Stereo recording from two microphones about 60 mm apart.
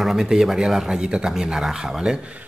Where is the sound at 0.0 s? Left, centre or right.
Centre.